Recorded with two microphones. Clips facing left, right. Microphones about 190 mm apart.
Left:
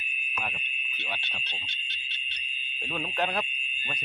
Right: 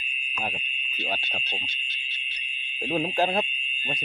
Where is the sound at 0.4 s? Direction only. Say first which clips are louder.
Right 5 dB; 30° right (ahead or behind).